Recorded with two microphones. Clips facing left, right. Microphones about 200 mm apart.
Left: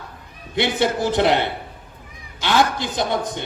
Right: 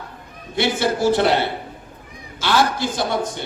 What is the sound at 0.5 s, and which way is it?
A man's voice, 20° left (ahead or behind).